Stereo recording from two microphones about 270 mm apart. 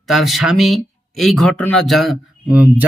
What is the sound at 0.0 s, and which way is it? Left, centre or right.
Speech, centre.